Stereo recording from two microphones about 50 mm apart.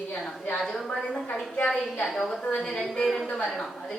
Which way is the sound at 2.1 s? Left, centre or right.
Centre.